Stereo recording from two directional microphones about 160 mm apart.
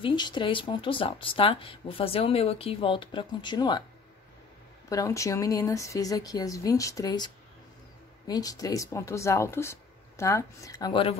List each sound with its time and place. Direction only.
0.0 s speech: 30° left (ahead or behind)
4.8 s speech: 20° left (ahead or behind)